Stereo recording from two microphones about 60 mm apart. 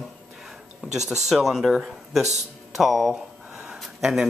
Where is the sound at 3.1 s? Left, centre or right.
Centre.